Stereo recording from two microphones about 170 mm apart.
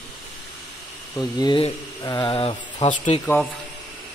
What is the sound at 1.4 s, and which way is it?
Speech, 30° left (ahead or behind).